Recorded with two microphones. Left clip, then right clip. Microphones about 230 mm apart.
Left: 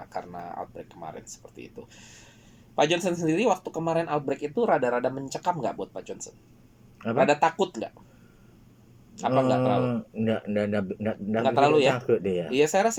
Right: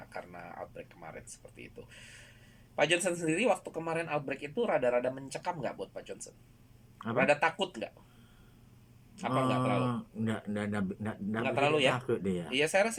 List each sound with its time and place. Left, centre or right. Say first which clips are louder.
0.1 s speech: left 9 dB; left
2.7 s speech: left 5 dB; centre
9.1 s a man's voice: left 8 dB; centre
9.8 s a man's voice: left 7 dB; centre
11.4 s a man's voice: left 8 dB; centre
11.9 s a man's voice: left 9 dB; centre
12.5 s a man's voice: left 6 dB; centre